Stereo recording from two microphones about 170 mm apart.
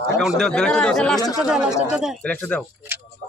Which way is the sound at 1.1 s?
20° left (ahead or behind).